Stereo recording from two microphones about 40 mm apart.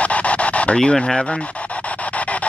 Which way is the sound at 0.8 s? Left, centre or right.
Centre.